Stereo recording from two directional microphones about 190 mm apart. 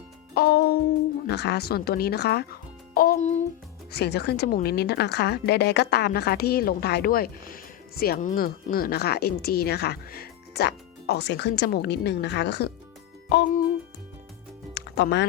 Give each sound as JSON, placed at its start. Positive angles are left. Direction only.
{"t": 0.3, "sound": "music", "side_deg": 55}
{"t": 1.3, "sound": "a woman's voice", "side_deg": 60}
{"t": 3.9, "sound": "a woman's voice", "side_deg": 60}
{"t": 14.8, "sound": "music", "side_deg": 65}